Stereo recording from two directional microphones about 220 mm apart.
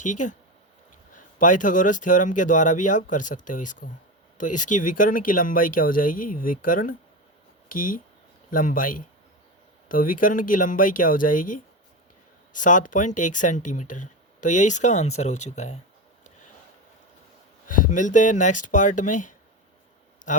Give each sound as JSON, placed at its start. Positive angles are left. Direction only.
{"t": 0.0, "sound": "speech", "side_deg": 35}
{"t": 17.7, "sound": "speech", "side_deg": 35}